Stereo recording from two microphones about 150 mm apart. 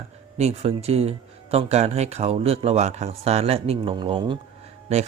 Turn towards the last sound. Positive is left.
turn(degrees=-50)  # may be behind; listen again after turning